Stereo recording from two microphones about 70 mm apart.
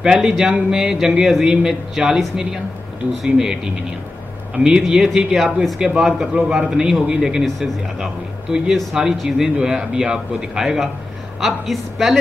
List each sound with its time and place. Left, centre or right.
0.0 s a man's voice: centre